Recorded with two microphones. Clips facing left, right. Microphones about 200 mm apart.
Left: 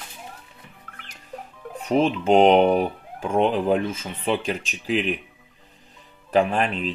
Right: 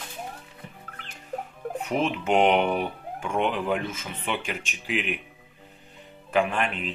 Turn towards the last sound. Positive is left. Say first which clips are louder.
# left 4 dB
turn(degrees=35)  # may be behind; listen again after turning